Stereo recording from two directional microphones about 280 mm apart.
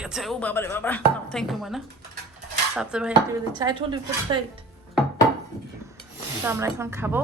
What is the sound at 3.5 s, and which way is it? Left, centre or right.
Speech, centre.